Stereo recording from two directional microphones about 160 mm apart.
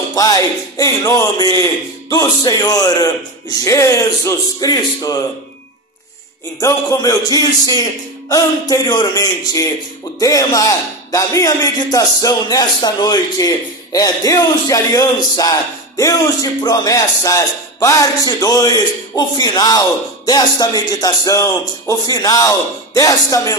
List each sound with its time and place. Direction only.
0.1 s speech: 20° left (ahead or behind)
6.6 s speech: 20° left (ahead or behind)